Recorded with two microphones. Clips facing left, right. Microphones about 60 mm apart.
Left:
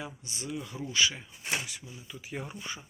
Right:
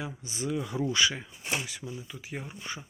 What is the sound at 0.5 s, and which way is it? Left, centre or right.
Speech, right.